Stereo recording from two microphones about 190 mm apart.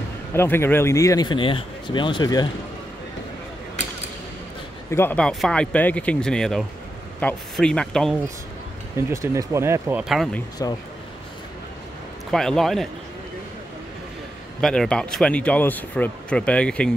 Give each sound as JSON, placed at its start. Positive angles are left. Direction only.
{"t": 0.3, "sound": "speech", "side_deg": 10}
{"t": 4.9, "sound": "speech", "side_deg": 10}
{"t": 8.9, "sound": "speech", "side_deg": -15}
{"t": 10.0, "sound": "speech", "side_deg": 0}
{"t": 12.3, "sound": "speech", "side_deg": 0}
{"t": 14.6, "sound": "speech", "side_deg": 5}